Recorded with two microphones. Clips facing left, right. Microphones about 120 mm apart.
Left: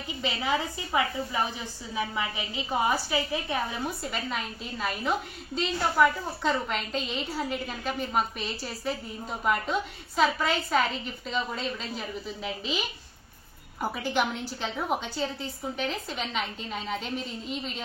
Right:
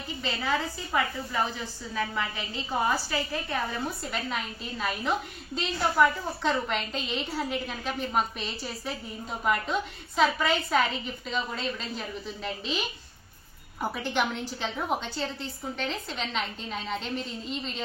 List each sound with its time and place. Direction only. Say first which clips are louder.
0.2 s a woman's voice: left 1 dB; 15° left (ahead or behind)